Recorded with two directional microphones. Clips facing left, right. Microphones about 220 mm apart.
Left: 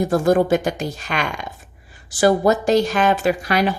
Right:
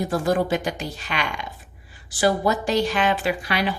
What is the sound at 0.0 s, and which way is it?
Speech, 45° left (ahead or behind).